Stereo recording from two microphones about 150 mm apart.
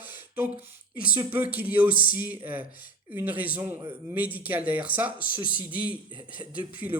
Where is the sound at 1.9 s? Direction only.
70° left (ahead or behind).